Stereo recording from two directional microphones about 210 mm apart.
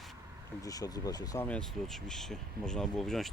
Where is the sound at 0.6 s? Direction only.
15° left (ahead or behind).